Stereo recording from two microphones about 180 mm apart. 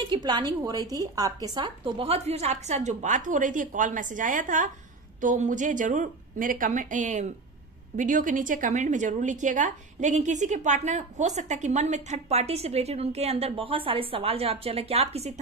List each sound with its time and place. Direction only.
0.1 s a woman's voice: 25° right (ahead or behind)